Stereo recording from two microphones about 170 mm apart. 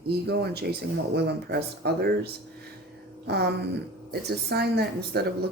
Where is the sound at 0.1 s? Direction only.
70° right (ahead or behind).